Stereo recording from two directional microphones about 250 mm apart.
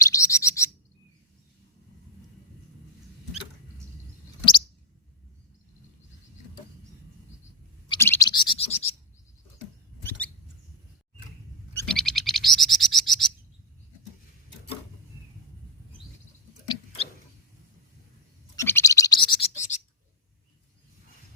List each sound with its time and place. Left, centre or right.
0.0 s chirp: centre
7.9 s a sound: centre; by 9.0 s left
10.1 s rodents: centre
11.7 s bird: centre
18.5 s bird: centre; by 19.8 s left